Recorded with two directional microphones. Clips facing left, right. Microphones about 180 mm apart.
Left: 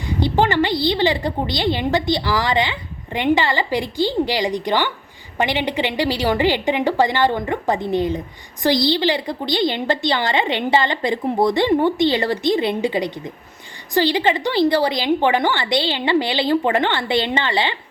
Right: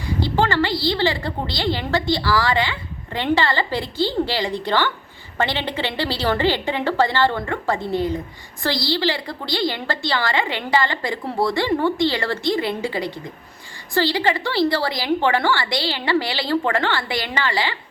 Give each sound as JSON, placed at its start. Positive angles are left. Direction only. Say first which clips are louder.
{"t": 0.2, "sound": "a woman's voice", "louder": "left 3 dB", "side_deg": 20}